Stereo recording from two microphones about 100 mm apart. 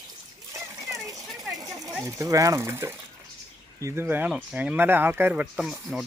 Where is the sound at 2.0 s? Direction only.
30° right (ahead or behind); by 5.6 s 15° right (ahead or behind).